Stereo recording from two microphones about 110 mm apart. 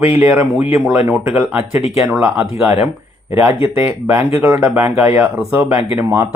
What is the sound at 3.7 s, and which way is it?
Speech, 20° right (ahead or behind).